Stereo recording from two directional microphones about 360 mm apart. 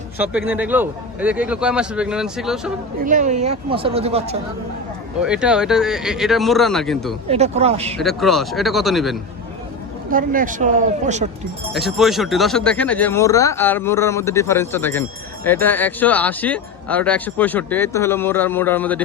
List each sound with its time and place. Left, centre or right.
0.2 s speech: centre
3.0 s speech: right
5.2 s speech: centre
7.3 s speech: centre
7.9 s speech: centre
10.1 s speech: right
11.7 s speech: centre